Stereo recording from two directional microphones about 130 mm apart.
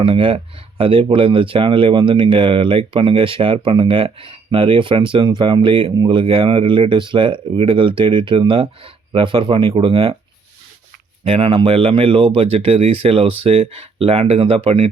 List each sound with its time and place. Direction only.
0.0 s speech: 45° right (ahead or behind)
11.2 s speech: 45° right (ahead or behind)